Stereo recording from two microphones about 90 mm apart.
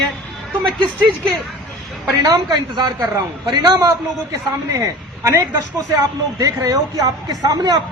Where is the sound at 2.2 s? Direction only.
45° right (ahead or behind).